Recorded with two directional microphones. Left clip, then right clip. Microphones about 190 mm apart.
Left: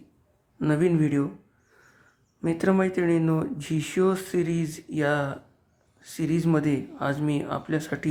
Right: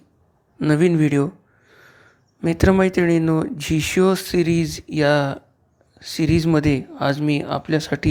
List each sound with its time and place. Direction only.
0.7 s speech: 30° right (ahead or behind)
2.4 s speech: 30° right (ahead or behind)